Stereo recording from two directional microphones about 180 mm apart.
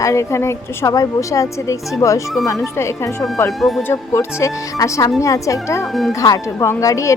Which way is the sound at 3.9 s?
15° left (ahead or behind).